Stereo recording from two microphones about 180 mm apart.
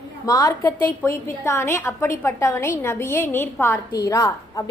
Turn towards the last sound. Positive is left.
turn(degrees=20)  # may be behind; listen again after turning